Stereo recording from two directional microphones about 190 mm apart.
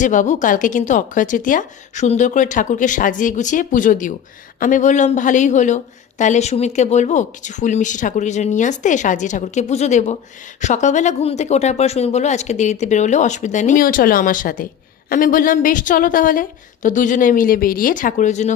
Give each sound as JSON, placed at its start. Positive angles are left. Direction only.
{"t": 0.0, "sound": "a woman's voice", "side_deg": 40}